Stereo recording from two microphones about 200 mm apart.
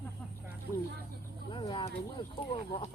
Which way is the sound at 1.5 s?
25° left (ahead or behind).